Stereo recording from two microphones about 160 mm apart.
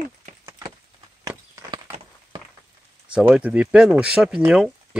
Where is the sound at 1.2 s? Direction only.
20° right (ahead or behind).